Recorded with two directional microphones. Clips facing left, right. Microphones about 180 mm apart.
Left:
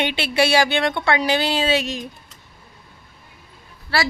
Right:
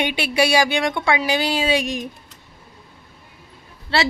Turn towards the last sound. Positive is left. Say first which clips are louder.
# right 2 dB
turn(degrees=-25)  # may be behind; listen again after turning